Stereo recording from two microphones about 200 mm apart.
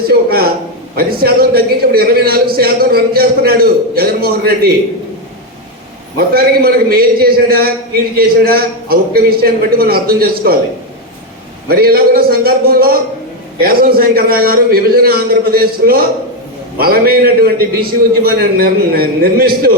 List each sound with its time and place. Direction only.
0.1 s a man's voice: 50° right (ahead or behind)
6.1 s a man's voice: 50° right (ahead or behind)
11.7 s a man's voice: 50° right (ahead or behind)